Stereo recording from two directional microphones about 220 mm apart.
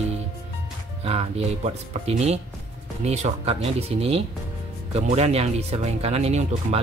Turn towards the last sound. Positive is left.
turn(degrees=-30)  # may be behind; listen again after turning